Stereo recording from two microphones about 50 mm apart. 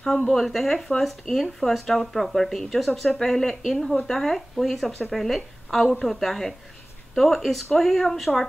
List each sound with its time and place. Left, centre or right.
0.0 s speech: centre